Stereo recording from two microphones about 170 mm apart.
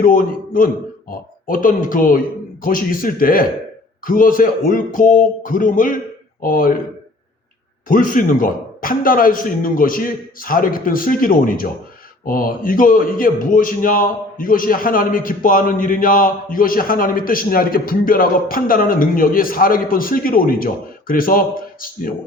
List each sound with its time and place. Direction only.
0.0 s a man's voice: 55° left (ahead or behind)
7.9 s a man's voice: 50° left (ahead or behind)